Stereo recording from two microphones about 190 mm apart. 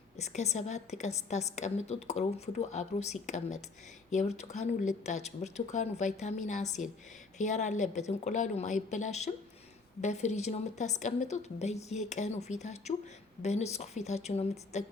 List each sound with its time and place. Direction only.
0.2 s a woman's voice: 35° left (ahead or behind)